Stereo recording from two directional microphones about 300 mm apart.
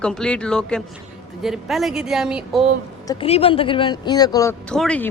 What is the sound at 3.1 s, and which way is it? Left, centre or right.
Speech, centre.